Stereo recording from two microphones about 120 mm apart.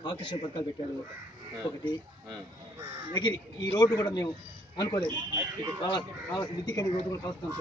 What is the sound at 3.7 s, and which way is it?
A man's voice, 30° left (ahead or behind).